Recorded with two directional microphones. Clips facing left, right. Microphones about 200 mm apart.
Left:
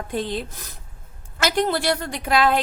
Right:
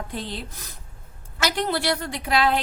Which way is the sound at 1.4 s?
50° left (ahead or behind).